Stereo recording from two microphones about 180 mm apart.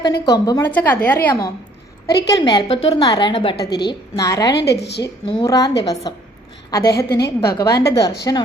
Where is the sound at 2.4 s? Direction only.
30° left (ahead or behind).